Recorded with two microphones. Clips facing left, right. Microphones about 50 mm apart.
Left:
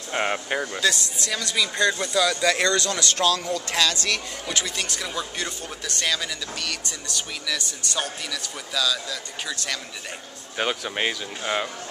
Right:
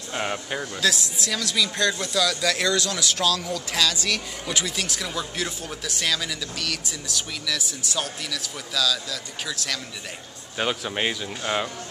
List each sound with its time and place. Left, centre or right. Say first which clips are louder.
0.1 s speech: left 3 dB; centre
0.7 s speech: even; centre
2.6 s speech: left 1 dB; centre